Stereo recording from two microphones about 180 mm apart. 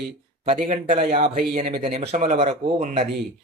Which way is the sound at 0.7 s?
40° right (ahead or behind).